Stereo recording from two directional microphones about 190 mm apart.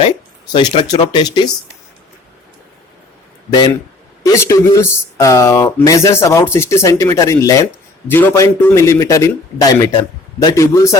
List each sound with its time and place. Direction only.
0.5 s speech: 25° left (ahead or behind)
4.2 s speech: 15° left (ahead or behind)